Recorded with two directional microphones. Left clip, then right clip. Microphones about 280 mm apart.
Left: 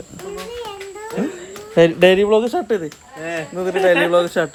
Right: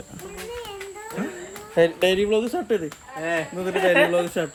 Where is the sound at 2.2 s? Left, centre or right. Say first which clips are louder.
Left 7 dB; left.